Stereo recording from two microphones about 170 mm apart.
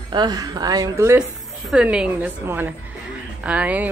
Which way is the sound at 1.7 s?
5° right (ahead or behind).